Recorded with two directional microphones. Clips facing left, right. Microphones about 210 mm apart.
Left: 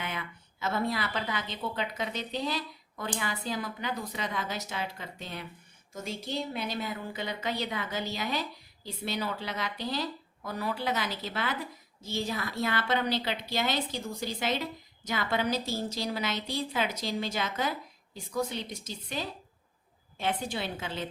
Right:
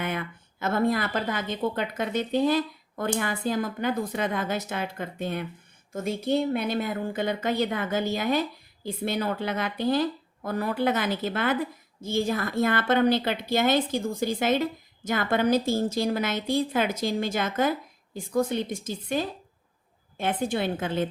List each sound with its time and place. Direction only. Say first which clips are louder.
0.0 s a woman's voice: right 7 dB; 50° right (ahead or behind)